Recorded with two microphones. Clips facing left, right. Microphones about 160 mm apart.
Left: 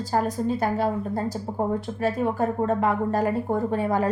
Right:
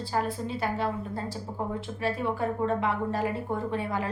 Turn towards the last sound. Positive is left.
turn(degrees=40)  # may be behind; listen again after turning